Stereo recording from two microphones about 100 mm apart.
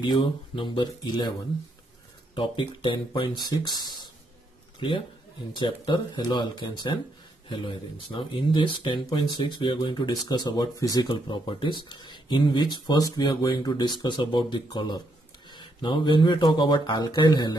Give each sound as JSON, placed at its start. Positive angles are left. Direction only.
{"t": 0.0, "sound": "speech", "side_deg": 50}
{"t": 2.3, "sound": "speech", "side_deg": 55}
{"t": 4.7, "sound": "a man's voice", "side_deg": 60}
{"t": 7.4, "sound": "speech", "side_deg": 55}
{"t": 11.1, "sound": "speech", "side_deg": 50}